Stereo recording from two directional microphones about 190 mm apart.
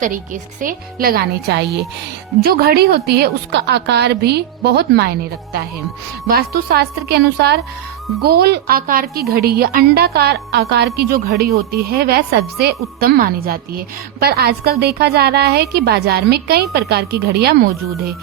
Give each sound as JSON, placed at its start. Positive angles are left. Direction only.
{"t": 0.6, "sound": "a woman's voice", "side_deg": -50}
{"t": 6.2, "sound": "a woman's voice", "side_deg": -55}